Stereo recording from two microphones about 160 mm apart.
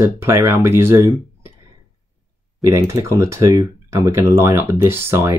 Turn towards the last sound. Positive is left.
turn(degrees=-15)  # may be behind; listen again after turning